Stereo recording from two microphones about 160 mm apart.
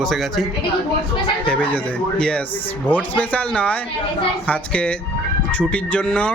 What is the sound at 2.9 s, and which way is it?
Speech, 10° left (ahead or behind).